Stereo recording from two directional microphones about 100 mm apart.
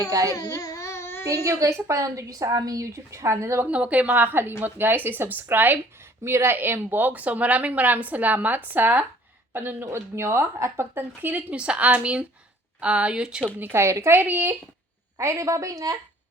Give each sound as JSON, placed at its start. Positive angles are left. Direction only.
{"t": 0.1, "sound": "a woman's voice", "side_deg": -35}
{"t": 0.3, "sound": "a sound", "side_deg": 35}
{"t": 1.5, "sound": "a woman's voice", "side_deg": -35}
{"t": 3.7, "sound": "a woman's voice", "side_deg": -15}
{"t": 13.6, "sound": "a woman's voice", "side_deg": -25}
{"t": 15.2, "sound": "a woman's voice", "side_deg": -30}